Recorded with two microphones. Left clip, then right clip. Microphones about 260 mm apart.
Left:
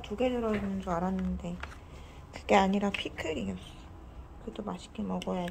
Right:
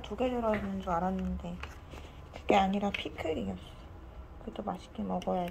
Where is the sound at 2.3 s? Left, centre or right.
Centre.